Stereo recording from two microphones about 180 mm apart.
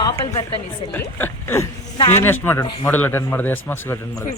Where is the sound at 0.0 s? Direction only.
20° left (ahead or behind).